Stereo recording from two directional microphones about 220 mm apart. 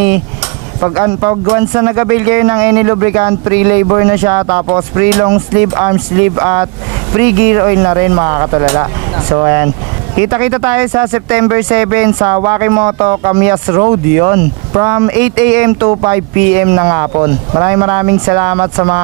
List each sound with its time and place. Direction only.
0.8 s speech: 20° right (ahead or behind)